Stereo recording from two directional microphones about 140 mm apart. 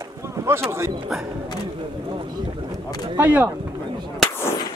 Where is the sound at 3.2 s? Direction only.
10° right (ahead or behind).